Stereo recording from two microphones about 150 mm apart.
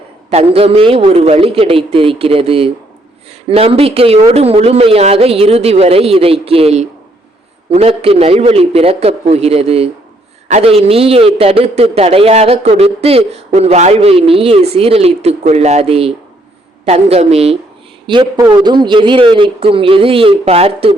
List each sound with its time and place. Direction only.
0.3 s a man's voice: 45° right (ahead or behind)
18.0 s a man's voice: 30° right (ahead or behind)